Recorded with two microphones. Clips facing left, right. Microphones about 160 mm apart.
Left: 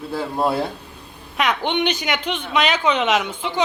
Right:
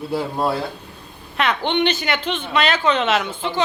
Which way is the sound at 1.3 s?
10° left (ahead or behind).